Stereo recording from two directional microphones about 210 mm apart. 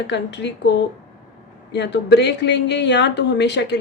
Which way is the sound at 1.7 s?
55° left (ahead or behind).